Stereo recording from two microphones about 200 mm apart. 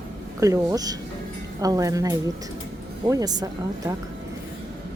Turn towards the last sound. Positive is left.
turn(degrees=-20)  # may be behind; listen again after turning